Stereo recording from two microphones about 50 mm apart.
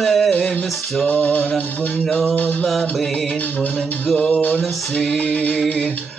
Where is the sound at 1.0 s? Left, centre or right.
Left.